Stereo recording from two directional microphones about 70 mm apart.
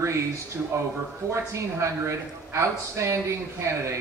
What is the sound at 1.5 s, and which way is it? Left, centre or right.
Speech, right.